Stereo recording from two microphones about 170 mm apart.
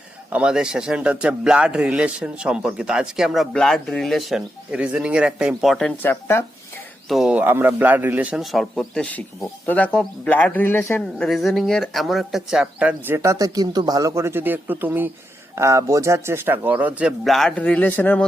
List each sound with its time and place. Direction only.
0.3 s a man's voice: 5° right (ahead or behind); by 6.4 s 15° left (ahead or behind)
7.1 s a man's voice: 5° right (ahead or behind)